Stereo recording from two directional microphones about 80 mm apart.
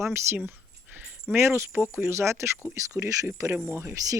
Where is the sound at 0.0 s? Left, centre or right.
Right.